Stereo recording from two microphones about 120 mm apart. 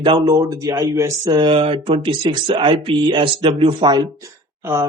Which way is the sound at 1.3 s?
40° right (ahead or behind).